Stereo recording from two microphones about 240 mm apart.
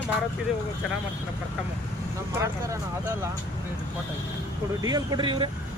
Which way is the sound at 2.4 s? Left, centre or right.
Centre.